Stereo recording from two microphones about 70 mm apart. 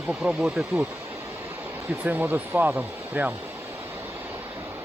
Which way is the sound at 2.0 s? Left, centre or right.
Right.